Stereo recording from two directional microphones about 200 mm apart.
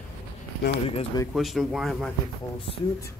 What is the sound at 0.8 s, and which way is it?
Speech, 30° left (ahead or behind).